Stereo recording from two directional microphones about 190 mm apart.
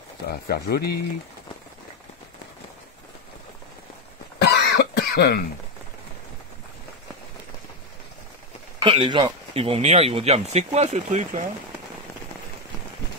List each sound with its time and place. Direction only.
0.3 s speech: 55° left (ahead or behind)
4.4 s cough: 60° left (ahead or behind)
8.8 s speech: 25° right (ahead or behind)